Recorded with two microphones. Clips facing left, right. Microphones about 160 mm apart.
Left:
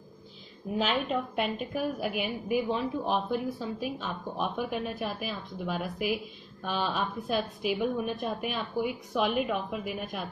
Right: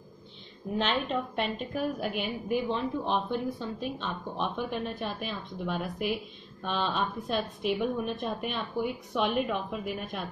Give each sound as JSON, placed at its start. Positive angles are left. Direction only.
{"t": 0.7, "sound": "a woman's voice", "side_deg": 0}